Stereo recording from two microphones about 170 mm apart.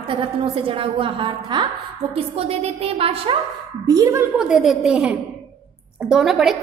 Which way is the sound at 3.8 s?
20° right (ahead or behind).